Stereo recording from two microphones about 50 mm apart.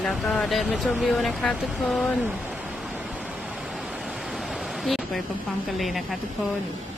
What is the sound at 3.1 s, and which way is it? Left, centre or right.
Pink noise, right.